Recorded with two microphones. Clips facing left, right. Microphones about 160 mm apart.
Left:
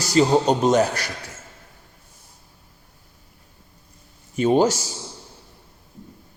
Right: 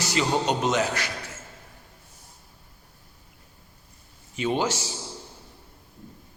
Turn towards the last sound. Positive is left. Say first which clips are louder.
# left 8 dB
turn(degrees=40)  # may be behind; listen again after turning